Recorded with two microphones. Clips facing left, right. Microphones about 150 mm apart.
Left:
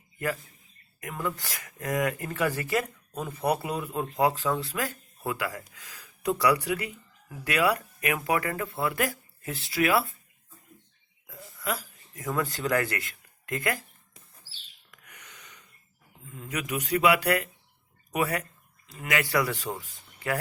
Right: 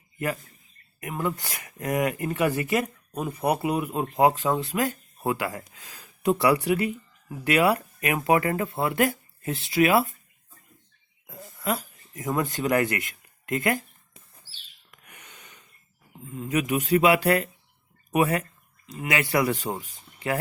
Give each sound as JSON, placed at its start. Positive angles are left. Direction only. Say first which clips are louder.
{"t": 1.0, "sound": "speech", "louder": "right 4 dB", "side_deg": -20}
{"t": 11.3, "sound": "speech", "louder": "right 4 dB", "side_deg": -25}
{"t": 14.8, "sound": "a sound", "louder": "right 2 dB", "side_deg": -25}
{"t": 16.3, "sound": "speech", "louder": "right 7 dB", "side_deg": -25}